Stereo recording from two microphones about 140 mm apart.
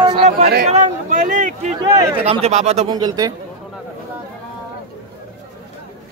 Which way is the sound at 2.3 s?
50° right (ahead or behind).